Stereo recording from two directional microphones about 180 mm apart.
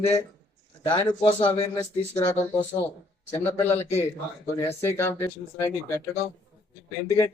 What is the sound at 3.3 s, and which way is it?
Speech, 15° left (ahead or behind).